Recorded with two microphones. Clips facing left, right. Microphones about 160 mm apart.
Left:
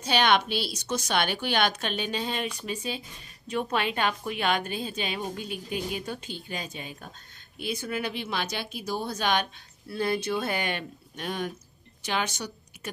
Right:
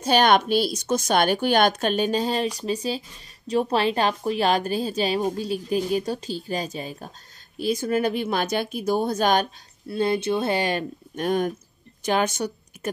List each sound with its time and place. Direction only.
0.0 s a woman's voice: 45° right (ahead or behind)
9.8 s a woman's voice: 25° right (ahead or behind); by 12.9 s 50° right (ahead or behind)